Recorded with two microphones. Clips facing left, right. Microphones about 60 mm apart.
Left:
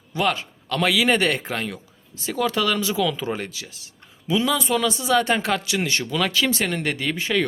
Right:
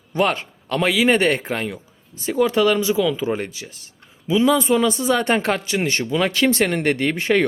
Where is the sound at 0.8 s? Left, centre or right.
Right.